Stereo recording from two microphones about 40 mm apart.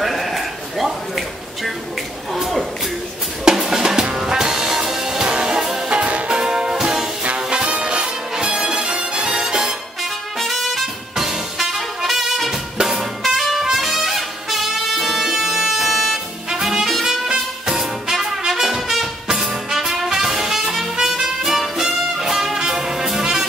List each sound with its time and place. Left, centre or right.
0.0 s a sound: centre
3.5 s music: centre
5.9 s music: right
6.3 s music: centre
9.3 s music: centre
10.4 s music: centre
11.1 s music: centre
16.4 s music: centre
22.6 s trumpet: centre